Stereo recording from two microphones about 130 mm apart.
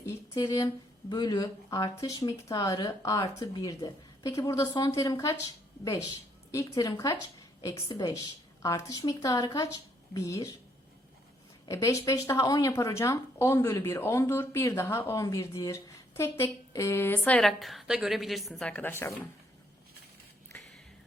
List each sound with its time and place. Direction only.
0.0 s a sound: 25° left (ahead or behind)
1.1 s speech: 35° left (ahead or behind)
11.7 s speech: 25° left (ahead or behind)